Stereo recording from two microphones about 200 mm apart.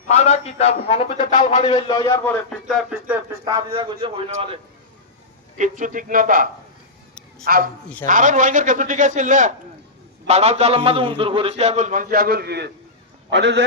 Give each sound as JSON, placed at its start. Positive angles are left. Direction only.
{"t": 0.1, "sound": "a man's voice", "side_deg": 35}
{"t": 2.9, "sound": "speech", "side_deg": -15}
{"t": 3.7, "sound": "a man's voice", "side_deg": -30}
{"t": 5.5, "sound": "a man's voice", "side_deg": -40}